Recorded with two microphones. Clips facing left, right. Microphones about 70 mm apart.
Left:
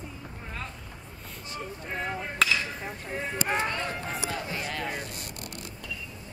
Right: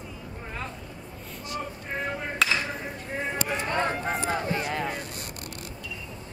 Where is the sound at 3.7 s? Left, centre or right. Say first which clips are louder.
Right 6 dB; right.